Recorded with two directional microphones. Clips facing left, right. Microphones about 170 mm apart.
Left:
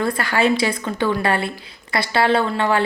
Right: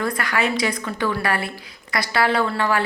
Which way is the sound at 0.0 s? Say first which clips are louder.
Left 4 dB; 30° left (ahead or behind).